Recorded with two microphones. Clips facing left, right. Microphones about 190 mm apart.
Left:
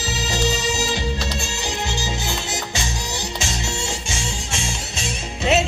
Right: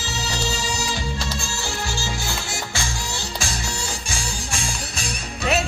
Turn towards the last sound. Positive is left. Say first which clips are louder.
# left 3 dB
turn(degrees=25)  # may be behind; listen again after turning